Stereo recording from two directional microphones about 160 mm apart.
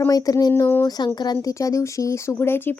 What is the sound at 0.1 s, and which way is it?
Speech, 20° left (ahead or behind).